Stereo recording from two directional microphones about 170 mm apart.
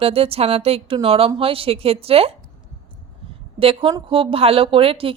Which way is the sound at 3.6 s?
30° right (ahead or behind).